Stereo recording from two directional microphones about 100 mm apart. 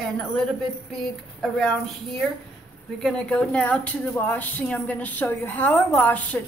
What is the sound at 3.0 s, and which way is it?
A woman's voice, 5° left (ahead or behind).